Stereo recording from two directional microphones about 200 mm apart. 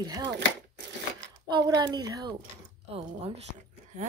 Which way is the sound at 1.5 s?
20° right (ahead or behind).